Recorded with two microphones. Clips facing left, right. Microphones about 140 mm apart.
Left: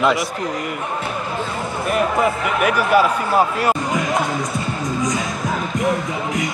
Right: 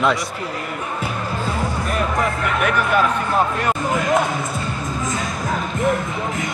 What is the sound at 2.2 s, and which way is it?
Speech, 5° left (ahead or behind).